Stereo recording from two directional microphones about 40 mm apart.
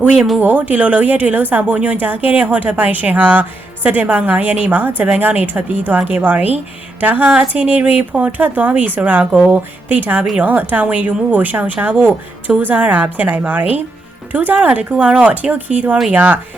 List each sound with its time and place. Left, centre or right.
0.3 s speech: right
9.5 s speech: right